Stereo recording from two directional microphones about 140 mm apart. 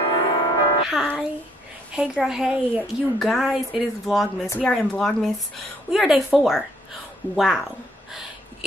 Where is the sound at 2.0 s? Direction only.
5° right (ahead or behind).